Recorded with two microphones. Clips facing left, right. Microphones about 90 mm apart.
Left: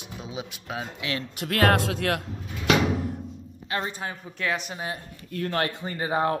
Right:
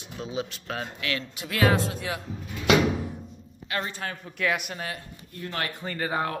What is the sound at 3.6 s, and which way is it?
Speech, 25° left (ahead or behind).